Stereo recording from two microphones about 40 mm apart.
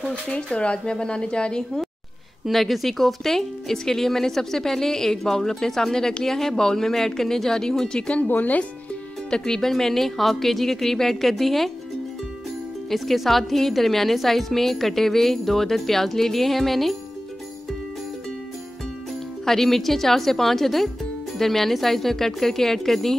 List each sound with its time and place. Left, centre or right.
0.1 s a woman's voice: left
2.5 s speech: centre
8.3 s speech: left
9.3 s speech: centre
12.9 s a woman's voice: centre
19.4 s speech: centre